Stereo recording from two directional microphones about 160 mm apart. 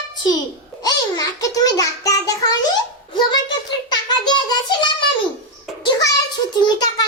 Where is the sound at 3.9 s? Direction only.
25° left (ahead or behind).